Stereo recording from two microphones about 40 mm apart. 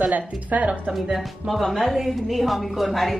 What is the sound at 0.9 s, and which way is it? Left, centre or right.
Speech, right.